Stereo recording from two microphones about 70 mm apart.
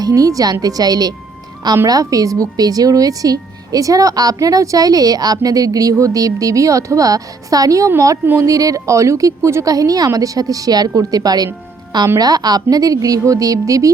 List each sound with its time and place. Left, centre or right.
0.0 s a woman's voice: right
1.9 s a woman's voice: right
9.6 s a woman's voice: right